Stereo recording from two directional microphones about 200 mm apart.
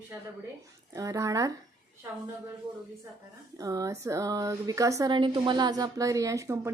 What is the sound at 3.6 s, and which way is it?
Speech, 15° right (ahead or behind).